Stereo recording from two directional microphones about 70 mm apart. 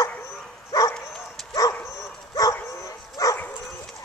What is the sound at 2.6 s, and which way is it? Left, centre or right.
Dog, left.